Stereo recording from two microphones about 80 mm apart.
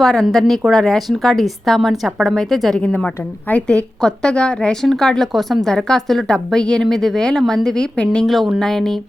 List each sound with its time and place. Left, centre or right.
0.0 s a woman's voice: centre
2.8 s a woman's voice: centre